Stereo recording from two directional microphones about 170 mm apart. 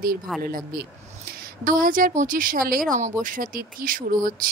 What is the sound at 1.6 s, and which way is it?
A woman's voice, 55° right (ahead or behind).